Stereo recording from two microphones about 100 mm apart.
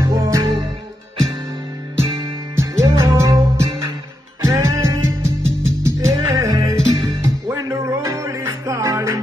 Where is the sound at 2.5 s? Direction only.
30° right (ahead or behind).